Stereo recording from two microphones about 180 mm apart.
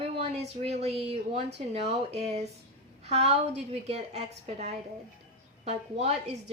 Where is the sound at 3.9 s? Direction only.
35° right (ahead or behind).